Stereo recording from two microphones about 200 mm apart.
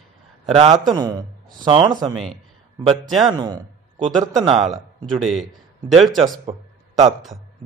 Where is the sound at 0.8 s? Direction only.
20° right (ahead or behind).